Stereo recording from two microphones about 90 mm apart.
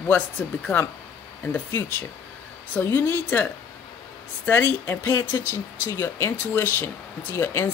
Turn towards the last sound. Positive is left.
turn(degrees=30)  # may be behind; listen again after turning